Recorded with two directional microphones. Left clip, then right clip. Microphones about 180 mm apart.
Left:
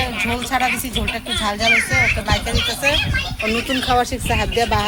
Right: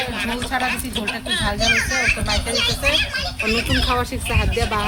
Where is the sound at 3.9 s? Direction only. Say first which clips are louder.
Left 4 dB; 5° left (ahead or behind).